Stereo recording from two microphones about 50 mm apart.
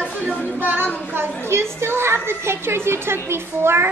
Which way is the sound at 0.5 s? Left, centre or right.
Right.